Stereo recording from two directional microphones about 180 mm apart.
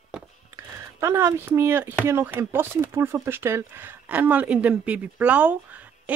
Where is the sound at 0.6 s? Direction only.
15° right (ahead or behind).